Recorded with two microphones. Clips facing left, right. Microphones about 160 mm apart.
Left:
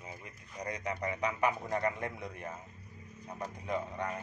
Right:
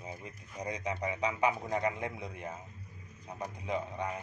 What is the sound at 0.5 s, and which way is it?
A man's voice, 20° right (ahead or behind).